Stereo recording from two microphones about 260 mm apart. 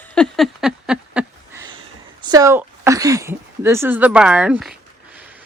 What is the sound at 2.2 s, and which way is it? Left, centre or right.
Speech, centre.